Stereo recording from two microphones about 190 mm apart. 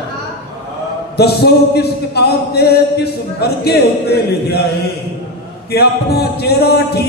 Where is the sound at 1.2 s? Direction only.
60° left (ahead or behind).